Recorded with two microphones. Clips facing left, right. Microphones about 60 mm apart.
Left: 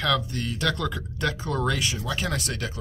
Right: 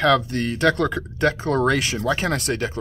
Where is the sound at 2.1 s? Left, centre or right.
Right.